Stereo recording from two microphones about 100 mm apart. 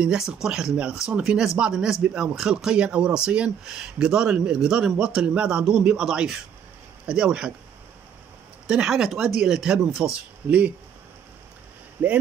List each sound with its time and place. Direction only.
0.0 s speech: 5° right (ahead or behind)
8.6 s speech: 5° right (ahead or behind)
12.0 s speech: 15° right (ahead or behind)